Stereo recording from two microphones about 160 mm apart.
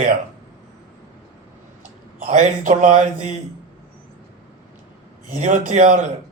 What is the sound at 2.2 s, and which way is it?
Speech, 50° right (ahead or behind).